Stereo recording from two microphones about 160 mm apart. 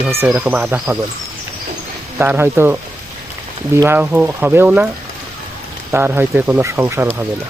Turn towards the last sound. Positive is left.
turn(degrees=-15)  # may be behind; listen again after turning